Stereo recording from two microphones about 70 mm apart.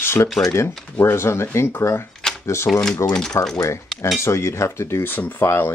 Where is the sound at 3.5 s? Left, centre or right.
Left.